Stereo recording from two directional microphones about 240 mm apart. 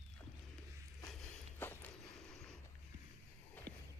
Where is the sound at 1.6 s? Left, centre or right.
Centre.